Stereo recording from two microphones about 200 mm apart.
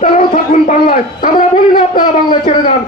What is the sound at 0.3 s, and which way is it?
Speech, 40° left (ahead or behind).